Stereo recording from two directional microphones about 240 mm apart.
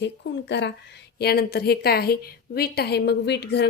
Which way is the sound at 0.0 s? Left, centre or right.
Left.